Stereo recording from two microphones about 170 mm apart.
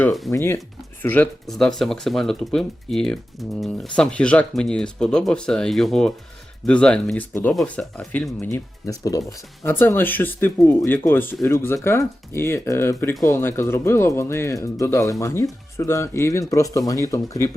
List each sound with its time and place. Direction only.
0.0 s speech: centre (ahead or behind)
0.3 s speech: 15° left (ahead or behind)